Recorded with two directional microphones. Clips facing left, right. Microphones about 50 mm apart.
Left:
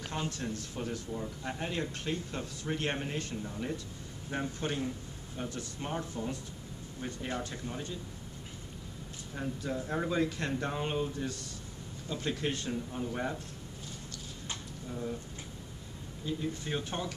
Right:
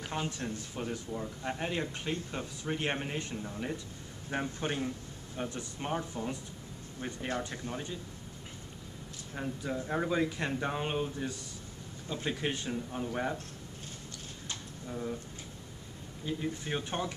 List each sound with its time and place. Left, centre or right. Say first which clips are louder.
0.1 s speech: even; centre
9.3 s speech: even; centre
14.9 s speech: right 1 dB; centre
16.3 s speech: even; centre